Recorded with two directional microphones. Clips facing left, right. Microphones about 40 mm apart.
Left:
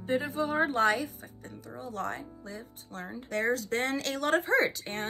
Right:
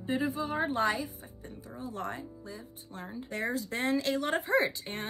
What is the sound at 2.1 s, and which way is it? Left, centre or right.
Speech, left.